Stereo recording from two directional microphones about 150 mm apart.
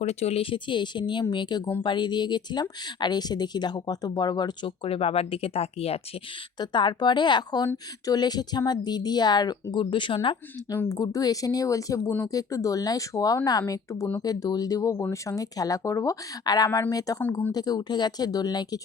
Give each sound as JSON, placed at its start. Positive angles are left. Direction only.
{"t": 0.0, "sound": "speech", "side_deg": 45}
{"t": 6.6, "sound": "speech", "side_deg": 30}
{"t": 10.8, "sound": "speech", "side_deg": 25}
{"t": 17.2, "sound": "speech", "side_deg": 10}
{"t": 17.5, "sound": "speech", "side_deg": 25}